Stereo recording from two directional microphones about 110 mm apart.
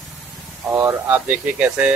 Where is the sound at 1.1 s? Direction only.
15° right (ahead or behind).